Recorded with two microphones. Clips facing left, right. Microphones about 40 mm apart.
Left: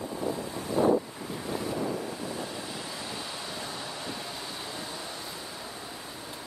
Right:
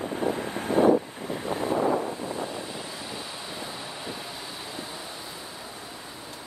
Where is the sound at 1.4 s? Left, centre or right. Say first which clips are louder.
Right 6 dB; right.